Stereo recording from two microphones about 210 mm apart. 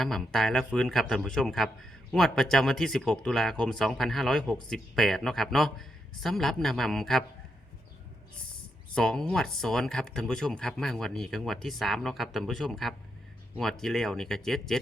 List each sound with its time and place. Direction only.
0.0 s speech: centre (ahead or behind)
9.0 s speech: 5° left (ahead or behind)